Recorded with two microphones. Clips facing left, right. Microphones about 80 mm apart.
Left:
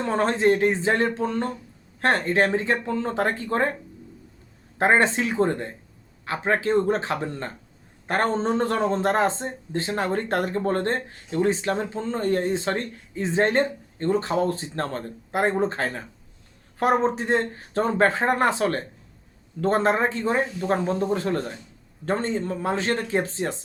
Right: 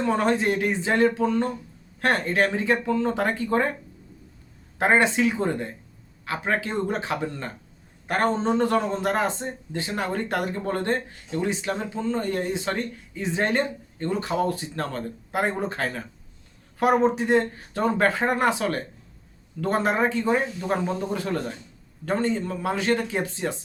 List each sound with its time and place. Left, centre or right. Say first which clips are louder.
0.0 s speech: left 1 dB; left
4.8 s speech: even; left